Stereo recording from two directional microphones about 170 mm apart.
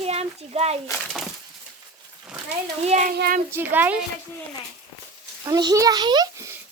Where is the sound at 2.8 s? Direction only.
40° right (ahead or behind).